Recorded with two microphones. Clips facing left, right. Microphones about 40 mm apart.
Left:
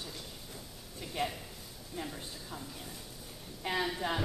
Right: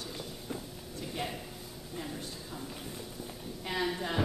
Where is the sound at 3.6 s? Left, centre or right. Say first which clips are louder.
Even; centre.